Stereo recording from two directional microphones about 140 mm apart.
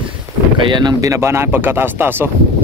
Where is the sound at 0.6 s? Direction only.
30° right (ahead or behind); by 2.3 s 15° right (ahead or behind).